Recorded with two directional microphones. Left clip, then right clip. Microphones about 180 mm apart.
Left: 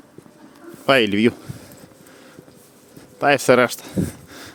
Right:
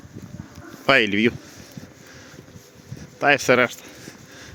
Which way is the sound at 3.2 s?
20° left (ahead or behind).